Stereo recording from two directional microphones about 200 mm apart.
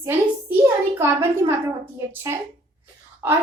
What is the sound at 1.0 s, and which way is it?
Speech, 15° right (ahead or behind).